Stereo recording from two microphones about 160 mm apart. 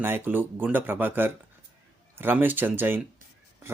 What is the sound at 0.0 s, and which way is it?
Speech, 15° right (ahead or behind).